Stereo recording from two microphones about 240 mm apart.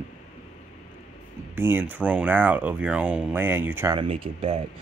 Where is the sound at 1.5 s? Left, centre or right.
Centre; by 4.6 s right.